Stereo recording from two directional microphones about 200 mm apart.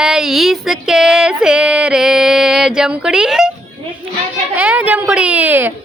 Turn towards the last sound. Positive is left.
turn(degrees=-10)  # may be behind; listen again after turning